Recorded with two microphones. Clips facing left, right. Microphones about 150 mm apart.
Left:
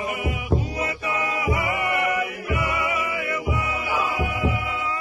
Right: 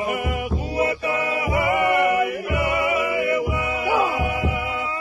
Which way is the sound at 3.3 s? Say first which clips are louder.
Right 3 dB; 55° right (ahead or behind).